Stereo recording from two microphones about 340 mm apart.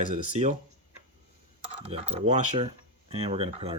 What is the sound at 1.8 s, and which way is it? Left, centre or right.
Speech, centre.